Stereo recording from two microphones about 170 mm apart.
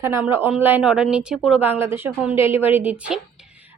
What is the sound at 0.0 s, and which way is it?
A woman's voice, 15° right (ahead or behind).